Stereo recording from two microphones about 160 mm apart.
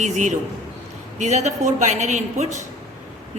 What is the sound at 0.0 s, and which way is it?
A woman's voice, 45° right (ahead or behind).